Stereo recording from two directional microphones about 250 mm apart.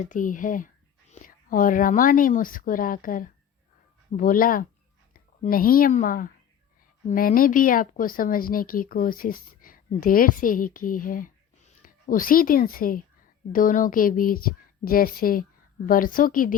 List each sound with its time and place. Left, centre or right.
0.0 s speech: left